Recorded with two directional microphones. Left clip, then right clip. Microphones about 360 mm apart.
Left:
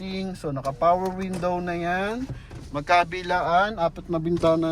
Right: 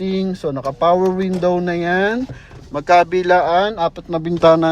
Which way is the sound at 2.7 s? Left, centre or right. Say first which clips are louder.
Right 8 dB; right.